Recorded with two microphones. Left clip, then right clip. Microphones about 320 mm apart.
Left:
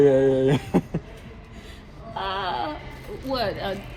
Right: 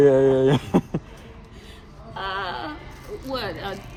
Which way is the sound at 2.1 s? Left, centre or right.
Centre.